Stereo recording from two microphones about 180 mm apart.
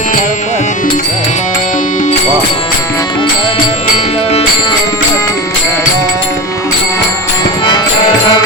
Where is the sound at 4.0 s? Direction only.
35° left (ahead or behind).